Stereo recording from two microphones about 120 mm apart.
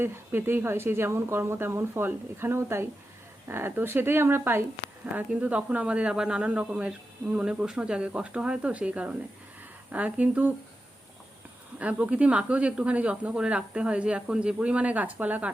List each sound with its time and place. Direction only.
0.0 s speech: 20° right (ahead or behind)
11.8 s speech: 10° right (ahead or behind)